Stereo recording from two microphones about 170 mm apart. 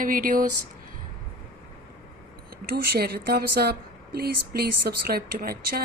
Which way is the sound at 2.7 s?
70° right (ahead or behind).